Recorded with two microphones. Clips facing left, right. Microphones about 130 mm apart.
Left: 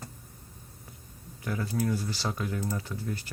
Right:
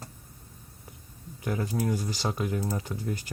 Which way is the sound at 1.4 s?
20° right (ahead or behind).